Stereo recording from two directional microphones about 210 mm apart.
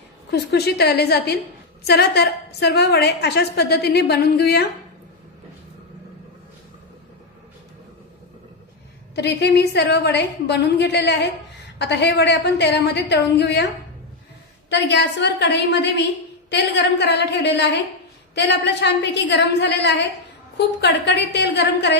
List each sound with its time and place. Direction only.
0.3 s a woman's voice: 50° left (ahead or behind)
9.1 s a woman's voice: 55° left (ahead or behind)
14.7 s a woman's voice: 55° left (ahead or behind)